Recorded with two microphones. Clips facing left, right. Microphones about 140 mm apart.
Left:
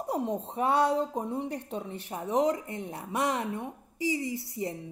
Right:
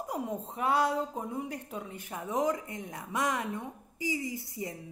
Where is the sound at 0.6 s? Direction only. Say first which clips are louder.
Left 3 dB; 30° left (ahead or behind).